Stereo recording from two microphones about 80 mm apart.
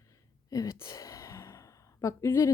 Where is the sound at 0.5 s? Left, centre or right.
Left.